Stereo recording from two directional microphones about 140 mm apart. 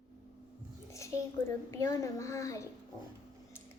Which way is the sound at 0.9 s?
20° left (ahead or behind).